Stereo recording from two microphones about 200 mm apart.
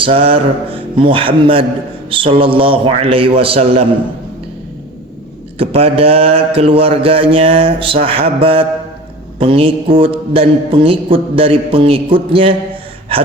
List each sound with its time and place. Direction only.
0.0 s mantra: 30° right (ahead or behind)
5.5 s mantra: 30° right (ahead or behind)